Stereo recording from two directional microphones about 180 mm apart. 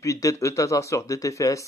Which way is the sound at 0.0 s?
20° left (ahead or behind).